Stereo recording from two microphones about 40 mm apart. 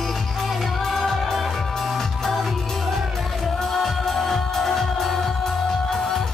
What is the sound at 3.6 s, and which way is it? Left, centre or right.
Music, centre.